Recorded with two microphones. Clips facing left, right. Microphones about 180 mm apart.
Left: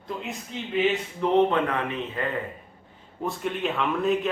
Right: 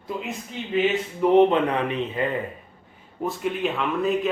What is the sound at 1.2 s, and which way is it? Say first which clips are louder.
Speech: right 4 dB; 15° right (ahead or behind).